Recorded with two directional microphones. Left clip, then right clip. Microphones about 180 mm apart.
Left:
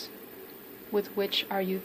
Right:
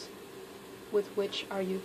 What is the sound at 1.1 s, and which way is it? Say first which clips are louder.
Speech: left 4 dB; 35° left (ahead or behind).